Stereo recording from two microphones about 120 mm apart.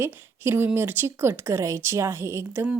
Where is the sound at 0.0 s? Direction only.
20° right (ahead or behind).